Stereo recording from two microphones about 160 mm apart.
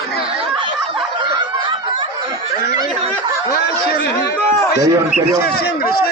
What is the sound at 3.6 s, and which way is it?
A man's voice, 80° left.